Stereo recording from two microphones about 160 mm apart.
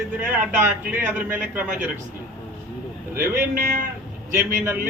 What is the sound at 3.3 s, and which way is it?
Speech, 55° right (ahead or behind).